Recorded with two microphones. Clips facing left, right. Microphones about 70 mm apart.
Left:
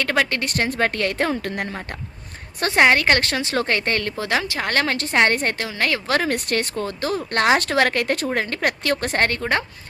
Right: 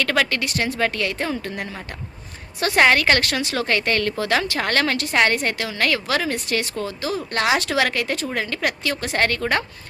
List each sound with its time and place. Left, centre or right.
0.0 s a woman's voice: left
0.4 s a woman's voice: left
2.7 s a woman's voice: left
5.3 s a woman's voice: left
5.5 s a woman's voice: left
6.1 s a woman's voice: left
9.1 s a woman's voice: left